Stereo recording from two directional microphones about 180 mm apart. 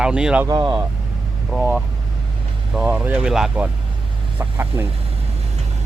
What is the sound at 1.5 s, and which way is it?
Speech, centre (ahead or behind).